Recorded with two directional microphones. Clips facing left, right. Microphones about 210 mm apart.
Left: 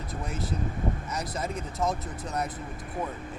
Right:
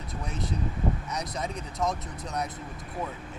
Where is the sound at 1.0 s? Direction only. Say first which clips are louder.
Left 1 dB; 5° left (ahead or behind).